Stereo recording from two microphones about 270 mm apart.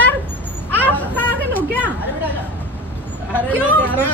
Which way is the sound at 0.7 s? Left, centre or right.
Centre.